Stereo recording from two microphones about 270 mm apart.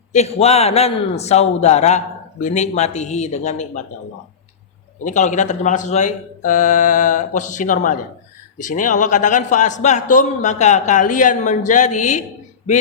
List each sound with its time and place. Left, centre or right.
0.1 s a man's voice: left
5.0 s a man's voice: left